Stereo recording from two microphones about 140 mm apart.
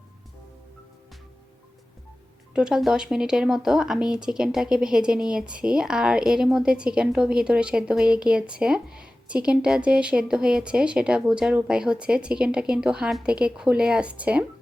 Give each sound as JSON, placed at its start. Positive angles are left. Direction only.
{"t": 2.5, "sound": "speech", "side_deg": -5}